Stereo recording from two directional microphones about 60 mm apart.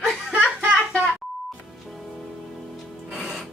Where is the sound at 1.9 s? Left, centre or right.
Centre.